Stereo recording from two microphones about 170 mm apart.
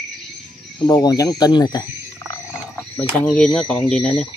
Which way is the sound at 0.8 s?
20° left (ahead or behind).